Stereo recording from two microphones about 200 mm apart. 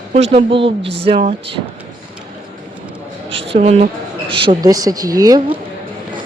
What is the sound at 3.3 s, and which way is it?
A woman's voice, 30° right (ahead or behind).